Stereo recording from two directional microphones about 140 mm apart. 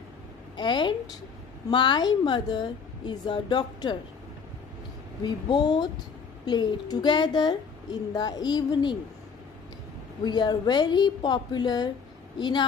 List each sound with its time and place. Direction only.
0.6 s a woman's voice: 35° left (ahead or behind)
5.2 s a woman's voice: 30° left (ahead or behind)
10.2 s a woman's voice: 30° left (ahead or behind)